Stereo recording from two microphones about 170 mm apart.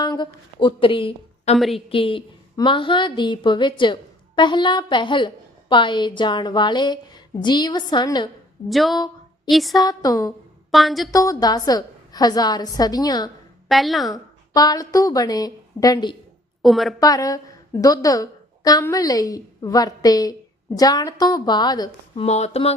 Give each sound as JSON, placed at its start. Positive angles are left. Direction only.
{"t": 0.0, "sound": "a woman's voice", "side_deg": 25}
{"t": 1.5, "sound": "a woman's voice", "side_deg": 0}
{"t": 1.9, "sound": "a woman's voice", "side_deg": 30}
{"t": 8.7, "sound": "a woman's voice", "side_deg": 0}
{"t": 9.7, "sound": "a woman's voice", "side_deg": 20}
{"t": 10.7, "sound": "a woman's voice", "side_deg": 0}
{"t": 11.1, "sound": "a woman's voice", "side_deg": 20}
{"t": 13.7, "sound": "a woman's voice", "side_deg": 0}
{"t": 14.1, "sound": "a woman's voice", "side_deg": 20}
{"t": 16.6, "sound": "a woman's voice", "side_deg": 0}
{"t": 17.0, "sound": "a woman's voice", "side_deg": 20}